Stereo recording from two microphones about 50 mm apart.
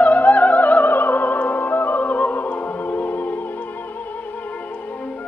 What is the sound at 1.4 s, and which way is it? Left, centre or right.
Opera, left.